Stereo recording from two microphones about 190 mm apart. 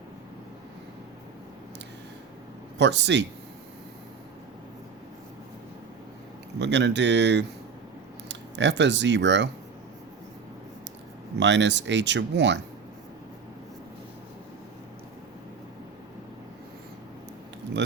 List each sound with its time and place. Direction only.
2.7 s speech: 65° right (ahead or behind)
6.6 s speech: 65° right (ahead or behind)
11.3 s speech: 70° right (ahead or behind)